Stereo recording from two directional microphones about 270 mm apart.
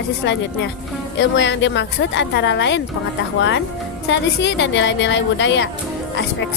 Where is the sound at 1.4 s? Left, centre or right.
Left.